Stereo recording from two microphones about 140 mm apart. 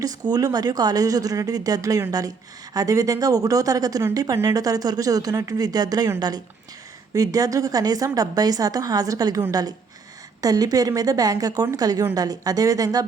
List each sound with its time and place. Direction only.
0.0 s speech: 25° right (ahead or behind)